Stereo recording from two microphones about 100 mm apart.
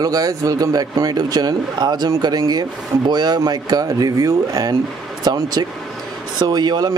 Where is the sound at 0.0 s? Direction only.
35° right (ahead or behind).